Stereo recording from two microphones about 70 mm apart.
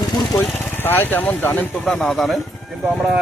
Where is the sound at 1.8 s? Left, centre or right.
Centre.